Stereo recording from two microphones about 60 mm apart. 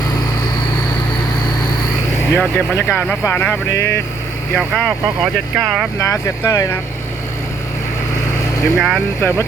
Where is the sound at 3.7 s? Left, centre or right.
Left.